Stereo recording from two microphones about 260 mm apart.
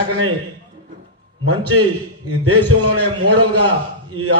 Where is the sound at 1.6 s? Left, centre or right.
Right.